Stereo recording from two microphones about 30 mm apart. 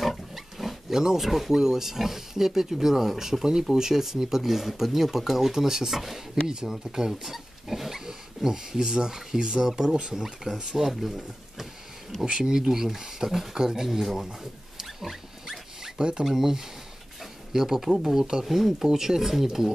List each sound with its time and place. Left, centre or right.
0.3 s wild animals: centre
1.2 s speech: centre
6.4 s speech: right
8.7 s speech: right
10.9 s speech: centre
12.3 s speech: right
13.6 s speech: right
13.8 s speech: centre
15.0 s pig: centre
16.0 s speech: right
16.3 s speech: centre
17.2 s a sound: centre
18.1 s speech: right
18.4 s speech: centre